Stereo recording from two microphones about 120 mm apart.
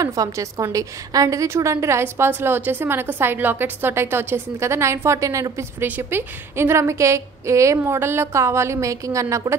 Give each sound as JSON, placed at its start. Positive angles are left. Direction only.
{"t": 0.0, "sound": "a woman's voice", "side_deg": -30}